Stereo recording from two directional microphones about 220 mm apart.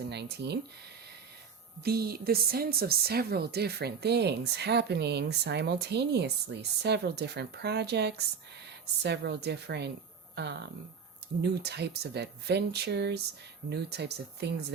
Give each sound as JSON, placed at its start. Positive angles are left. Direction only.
{"t": 0.1, "sound": "speech", "side_deg": -50}
{"t": 1.8, "sound": "speech", "side_deg": -45}